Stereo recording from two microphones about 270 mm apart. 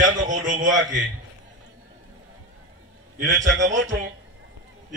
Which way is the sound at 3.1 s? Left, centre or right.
Right.